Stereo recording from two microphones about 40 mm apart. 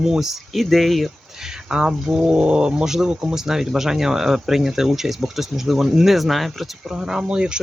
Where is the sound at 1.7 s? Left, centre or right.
Right; by 6.7 s centre.